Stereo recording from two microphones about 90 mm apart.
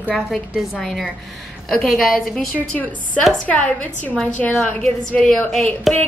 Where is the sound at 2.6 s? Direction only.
15° left (ahead or behind).